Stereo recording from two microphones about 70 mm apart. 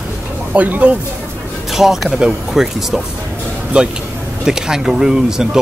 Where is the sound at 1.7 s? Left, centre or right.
Centre.